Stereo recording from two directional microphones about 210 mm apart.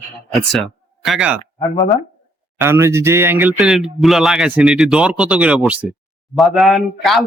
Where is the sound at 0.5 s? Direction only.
Centre (ahead or behind).